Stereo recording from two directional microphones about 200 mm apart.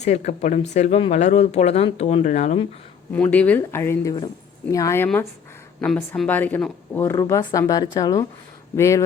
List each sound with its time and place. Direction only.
0.0 s speech: 35° left (ahead or behind)
3.1 s speech: 10° left (ahead or behind)